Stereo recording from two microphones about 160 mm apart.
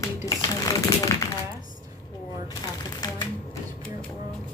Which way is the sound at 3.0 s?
25° left (ahead or behind).